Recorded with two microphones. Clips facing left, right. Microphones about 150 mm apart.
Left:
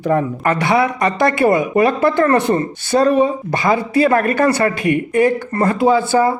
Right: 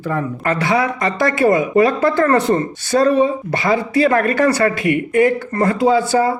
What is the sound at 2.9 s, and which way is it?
Speech, 30° left (ahead or behind).